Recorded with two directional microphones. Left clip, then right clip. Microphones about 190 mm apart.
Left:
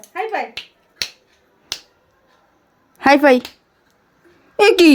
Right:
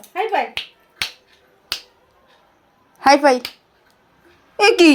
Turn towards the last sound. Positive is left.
turn(degrees=45)  # may be behind; listen again after turning